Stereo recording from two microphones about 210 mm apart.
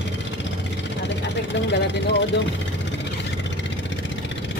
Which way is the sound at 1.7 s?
55° left (ahead or behind).